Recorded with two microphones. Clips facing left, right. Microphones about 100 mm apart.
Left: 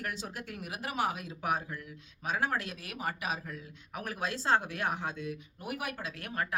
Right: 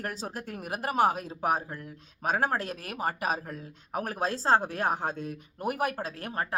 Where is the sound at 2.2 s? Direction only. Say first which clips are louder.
Right 5 dB; 45° right (ahead or behind).